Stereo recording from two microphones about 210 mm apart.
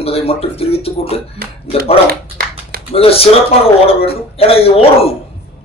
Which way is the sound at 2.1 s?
45° right (ahead or behind).